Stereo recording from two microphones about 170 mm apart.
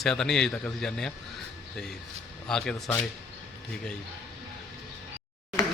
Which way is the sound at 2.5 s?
5° left (ahead or behind).